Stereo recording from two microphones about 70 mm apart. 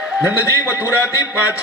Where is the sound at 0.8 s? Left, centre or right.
Left.